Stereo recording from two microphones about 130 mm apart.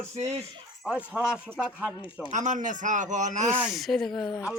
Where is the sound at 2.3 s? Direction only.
70° right (ahead or behind).